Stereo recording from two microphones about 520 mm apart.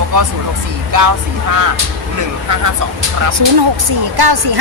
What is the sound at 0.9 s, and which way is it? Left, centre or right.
Speech, right.